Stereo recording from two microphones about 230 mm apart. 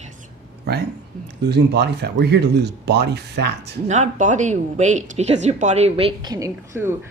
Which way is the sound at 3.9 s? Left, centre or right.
Right.